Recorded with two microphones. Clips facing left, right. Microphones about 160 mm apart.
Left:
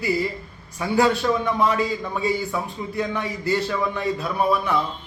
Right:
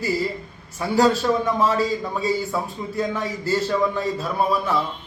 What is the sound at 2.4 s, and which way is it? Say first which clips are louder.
Speech: right 1 dB; 40° right (ahead or behind).